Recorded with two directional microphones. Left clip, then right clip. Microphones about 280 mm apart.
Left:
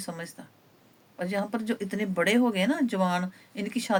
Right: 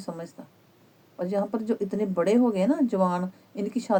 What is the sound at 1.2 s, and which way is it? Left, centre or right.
A woman's voice, left.